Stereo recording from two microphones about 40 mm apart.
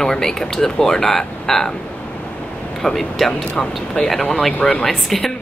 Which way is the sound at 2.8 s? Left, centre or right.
Centre.